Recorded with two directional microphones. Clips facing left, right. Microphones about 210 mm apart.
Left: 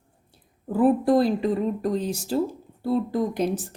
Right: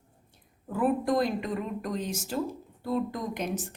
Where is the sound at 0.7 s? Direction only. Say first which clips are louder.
Left 7 dB; 30° left (ahead or behind).